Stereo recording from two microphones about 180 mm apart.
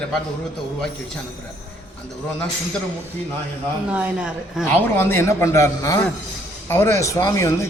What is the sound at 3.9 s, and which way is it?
Speech, 10° right (ahead or behind).